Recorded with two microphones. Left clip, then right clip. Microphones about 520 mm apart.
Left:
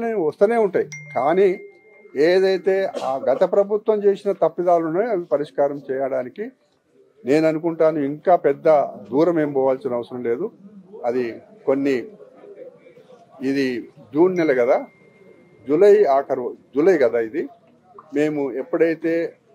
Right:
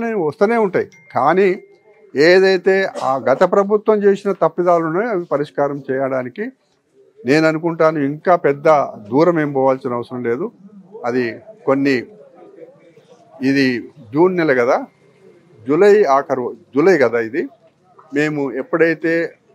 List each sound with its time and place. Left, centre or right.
0.0 s a man's voice: right
13.4 s speech: right